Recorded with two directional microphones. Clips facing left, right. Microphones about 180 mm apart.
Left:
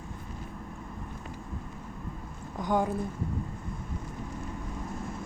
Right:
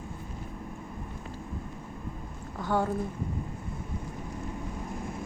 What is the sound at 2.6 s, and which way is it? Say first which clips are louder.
Speech: left 1 dB; 15° left (ahead or behind).